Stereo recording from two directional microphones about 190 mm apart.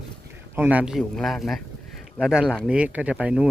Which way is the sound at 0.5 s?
10° right (ahead or behind).